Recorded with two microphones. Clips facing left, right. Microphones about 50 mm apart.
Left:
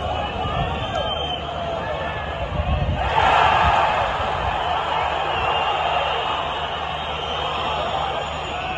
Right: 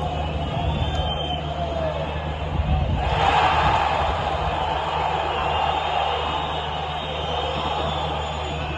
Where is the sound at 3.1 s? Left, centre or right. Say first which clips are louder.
Left 3 dB; left.